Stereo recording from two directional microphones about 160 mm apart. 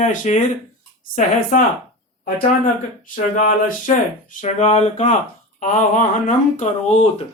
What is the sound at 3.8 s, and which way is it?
Speech, 55° left (ahead or behind).